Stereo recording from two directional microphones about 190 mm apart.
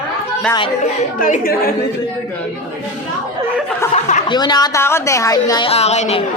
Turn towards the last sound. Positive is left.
turn(degrees=35)  # may be behind; listen again after turning